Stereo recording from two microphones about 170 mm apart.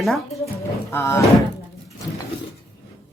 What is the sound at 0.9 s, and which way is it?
Speech, 15° left (ahead or behind).